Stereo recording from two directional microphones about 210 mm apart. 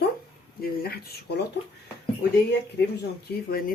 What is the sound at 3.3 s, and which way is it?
Speech, 45° left (ahead or behind).